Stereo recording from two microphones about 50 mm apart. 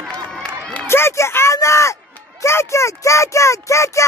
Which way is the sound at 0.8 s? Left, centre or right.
Left.